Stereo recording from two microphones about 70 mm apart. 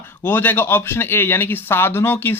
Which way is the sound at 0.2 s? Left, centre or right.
Left.